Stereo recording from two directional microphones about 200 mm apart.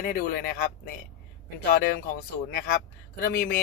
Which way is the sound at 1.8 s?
45° left (ahead or behind).